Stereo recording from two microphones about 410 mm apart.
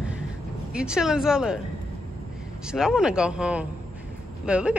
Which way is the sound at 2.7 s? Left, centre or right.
Centre.